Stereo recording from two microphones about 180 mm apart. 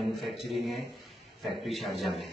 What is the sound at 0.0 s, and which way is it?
A man's voice, centre (ahead or behind).